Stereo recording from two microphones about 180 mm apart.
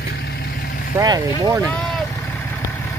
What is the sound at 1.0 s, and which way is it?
Speech, 20° right (ahead or behind).